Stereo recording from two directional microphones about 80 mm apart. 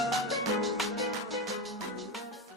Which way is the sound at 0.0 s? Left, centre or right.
Centre.